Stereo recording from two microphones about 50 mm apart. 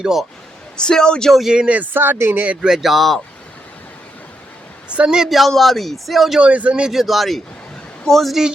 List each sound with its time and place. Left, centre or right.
0.0 s a man's voice: centre
0.8 s speech: centre
1.3 s a man's voice: centre
1.5 s speech: right
2.6 s a man's voice: centre
5.0 s a man's voice: centre
5.3 s a man's voice: centre
6.4 s a man's voice: right
6.9 s a man's voice: centre
8.3 s a man's voice: centre